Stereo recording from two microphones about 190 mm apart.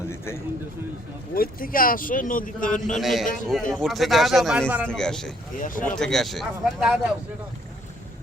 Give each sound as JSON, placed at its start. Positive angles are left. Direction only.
{"t": 1.3, "sound": "a man's voice", "side_deg": 50}
{"t": 2.9, "sound": "speech", "side_deg": 0}
{"t": 4.9, "sound": "speech", "side_deg": 5}
{"t": 5.5, "sound": "a man's voice", "side_deg": 45}
{"t": 6.0, "sound": "speech", "side_deg": 0}